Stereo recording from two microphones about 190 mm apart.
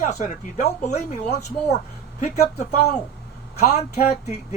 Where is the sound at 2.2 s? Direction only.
40° left (ahead or behind).